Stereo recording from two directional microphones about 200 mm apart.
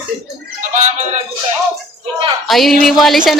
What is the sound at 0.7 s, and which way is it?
Music, 35° right (ahead or behind).